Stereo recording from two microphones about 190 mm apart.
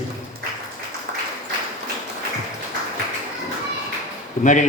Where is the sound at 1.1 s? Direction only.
40° right (ahead or behind).